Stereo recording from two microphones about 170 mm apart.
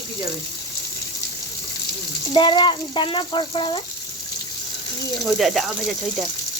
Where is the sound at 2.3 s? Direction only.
25° left (ahead or behind).